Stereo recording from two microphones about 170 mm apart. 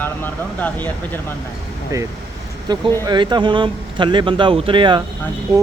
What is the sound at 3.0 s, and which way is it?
Speech, 25° right (ahead or behind).